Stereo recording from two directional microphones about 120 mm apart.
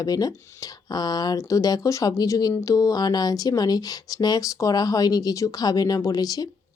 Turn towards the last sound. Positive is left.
turn(degrees=30)  # may be behind; listen again after turning